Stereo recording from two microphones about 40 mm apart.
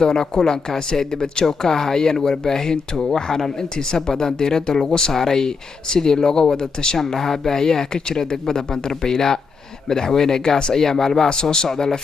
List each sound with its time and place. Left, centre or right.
0.0 s speech: centre